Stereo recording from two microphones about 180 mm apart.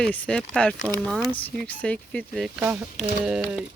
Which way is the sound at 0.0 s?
5° left (ahead or behind).